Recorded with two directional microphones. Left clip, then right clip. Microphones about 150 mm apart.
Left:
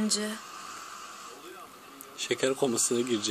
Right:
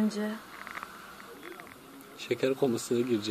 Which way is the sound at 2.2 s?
25° left (ahead or behind).